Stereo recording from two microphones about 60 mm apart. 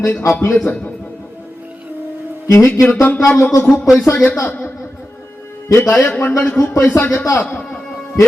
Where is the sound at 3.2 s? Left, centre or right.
Left.